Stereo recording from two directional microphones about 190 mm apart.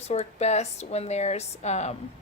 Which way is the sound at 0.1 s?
35° left (ahead or behind).